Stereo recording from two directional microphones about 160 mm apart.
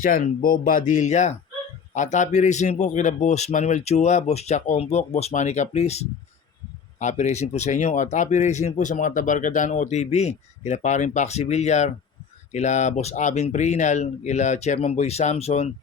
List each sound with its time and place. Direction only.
0.0 s speech: 60° left (ahead or behind); by 15.7 s 40° left (ahead or behind)